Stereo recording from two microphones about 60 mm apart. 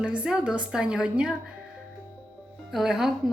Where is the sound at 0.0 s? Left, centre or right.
Centre.